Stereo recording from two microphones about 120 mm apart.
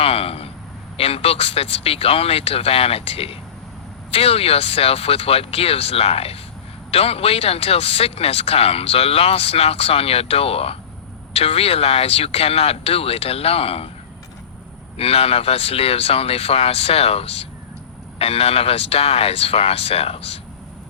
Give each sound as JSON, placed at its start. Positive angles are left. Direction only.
{"t": 0.0, "sound": "speech", "side_deg": 55}
{"t": 14.9, "sound": "speech", "side_deg": 55}